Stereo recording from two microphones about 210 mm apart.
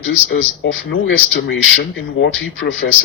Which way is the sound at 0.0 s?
65° left (ahead or behind).